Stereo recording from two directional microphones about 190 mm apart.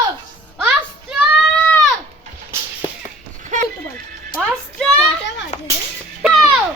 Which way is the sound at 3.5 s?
40° right (ahead or behind).